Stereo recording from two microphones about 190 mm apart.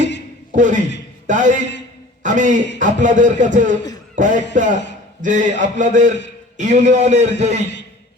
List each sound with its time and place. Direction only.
0.5 s a man's voice: 40° right (ahead or behind)